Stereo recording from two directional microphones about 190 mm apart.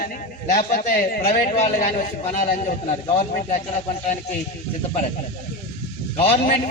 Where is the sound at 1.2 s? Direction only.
35° left (ahead or behind).